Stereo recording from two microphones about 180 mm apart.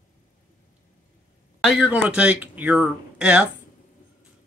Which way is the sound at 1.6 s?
Centre (ahead or behind).